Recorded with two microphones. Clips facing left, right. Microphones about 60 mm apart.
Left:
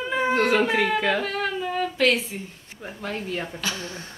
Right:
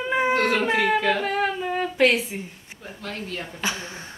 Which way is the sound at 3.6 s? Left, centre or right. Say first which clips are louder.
Right 1 dB; right.